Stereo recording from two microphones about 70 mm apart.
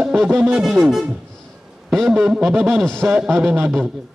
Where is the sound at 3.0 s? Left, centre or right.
Centre.